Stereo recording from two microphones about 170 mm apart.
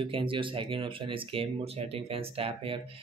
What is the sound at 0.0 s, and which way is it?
Speech, 30° right (ahead or behind).